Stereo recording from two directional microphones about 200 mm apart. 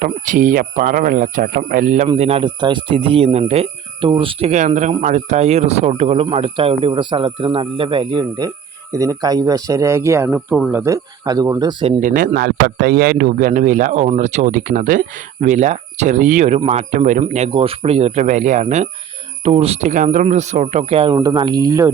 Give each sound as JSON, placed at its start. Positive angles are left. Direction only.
{"t": 0.0, "sound": "speech", "side_deg": -40}
{"t": 11.9, "sound": "a man's voice", "side_deg": -40}